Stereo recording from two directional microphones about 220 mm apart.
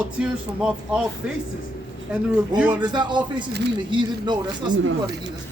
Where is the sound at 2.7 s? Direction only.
20° right (ahead or behind).